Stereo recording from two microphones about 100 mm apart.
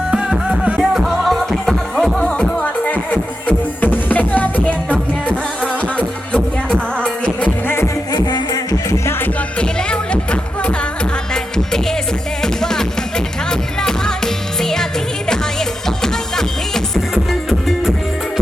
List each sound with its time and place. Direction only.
0.1 s music: 10° right (ahead or behind); by 4.9 s 15° left (ahead or behind)
8.1 s music: 40° left (ahead or behind)
9.6 s music: 10° left (ahead or behind)
11.5 s music: 5° left (ahead or behind)
16.0 s music: 5° left (ahead or behind)